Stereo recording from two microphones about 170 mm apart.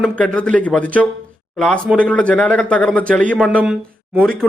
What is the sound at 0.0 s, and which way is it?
Speech, 5° left (ahead or behind).